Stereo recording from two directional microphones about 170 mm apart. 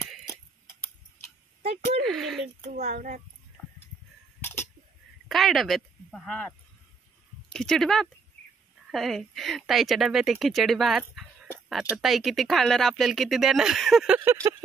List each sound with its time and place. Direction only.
2.0 s a sound: centre (ahead or behind)
2.7 s speech: 45° right (ahead or behind)
5.3 s speech: centre (ahead or behind)
7.5 s speech: 5° left (ahead or behind); by 14.5 s 15° right (ahead or behind)